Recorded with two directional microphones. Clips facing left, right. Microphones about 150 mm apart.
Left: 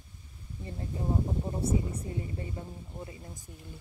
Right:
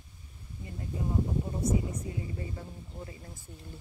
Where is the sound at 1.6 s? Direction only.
30° left (ahead or behind).